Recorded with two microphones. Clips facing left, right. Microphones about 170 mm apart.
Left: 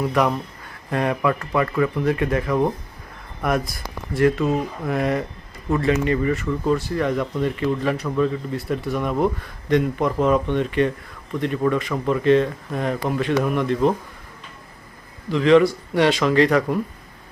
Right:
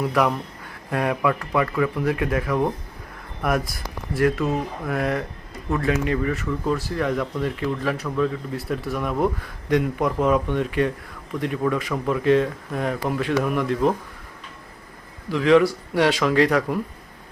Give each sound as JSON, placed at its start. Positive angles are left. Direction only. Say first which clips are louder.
{"t": 0.1, "sound": "speech", "louder": "left 1 dB", "side_deg": -5}
{"t": 15.3, "sound": "speech", "louder": "left 2 dB", "side_deg": -5}